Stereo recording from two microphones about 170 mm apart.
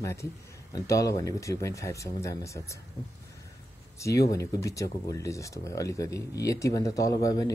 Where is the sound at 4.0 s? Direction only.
20° left (ahead or behind).